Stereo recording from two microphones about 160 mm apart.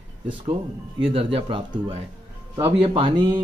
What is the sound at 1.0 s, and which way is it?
Speech, 35° right (ahead or behind).